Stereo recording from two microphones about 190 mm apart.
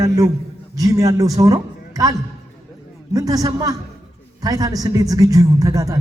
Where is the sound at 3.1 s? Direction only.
20° right (ahead or behind).